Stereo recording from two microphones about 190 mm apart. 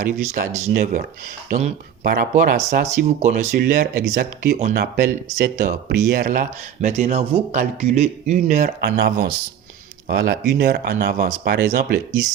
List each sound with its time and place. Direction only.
0.0 s speech: 45° right (ahead or behind)
2.0 s speech: 50° right (ahead or behind)
8.4 s speech: 50° right (ahead or behind)